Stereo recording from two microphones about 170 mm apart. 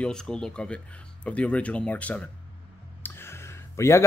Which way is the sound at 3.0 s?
15° left (ahead or behind).